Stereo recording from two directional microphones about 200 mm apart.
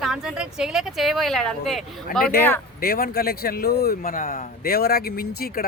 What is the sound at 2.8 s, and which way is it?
Speech, 50° left (ahead or behind).